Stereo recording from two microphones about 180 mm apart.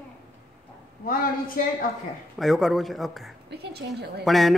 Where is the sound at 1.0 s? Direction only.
50° left (ahead or behind).